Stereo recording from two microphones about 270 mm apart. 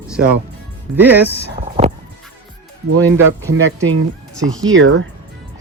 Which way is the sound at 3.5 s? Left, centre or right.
Right.